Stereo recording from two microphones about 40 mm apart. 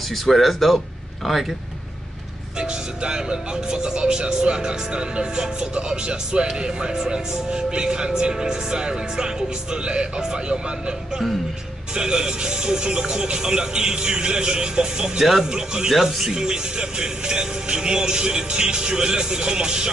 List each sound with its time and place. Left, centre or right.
0.1 s a man's voice: centre
2.6 s speech: right
15.9 s speech: centre